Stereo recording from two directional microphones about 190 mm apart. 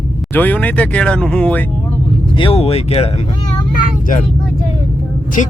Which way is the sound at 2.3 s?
30° left (ahead or behind).